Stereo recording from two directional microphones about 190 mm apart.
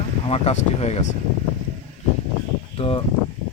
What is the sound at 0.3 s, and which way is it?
Speech, 30° left (ahead or behind).